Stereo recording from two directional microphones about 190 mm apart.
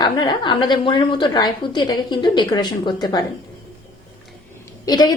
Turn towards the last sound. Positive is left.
turn(degrees=20)  # may be behind; listen again after turning